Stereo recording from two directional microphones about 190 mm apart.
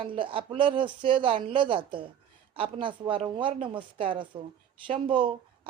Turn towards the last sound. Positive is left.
turn(degrees=-25)  # may be behind; listen again after turning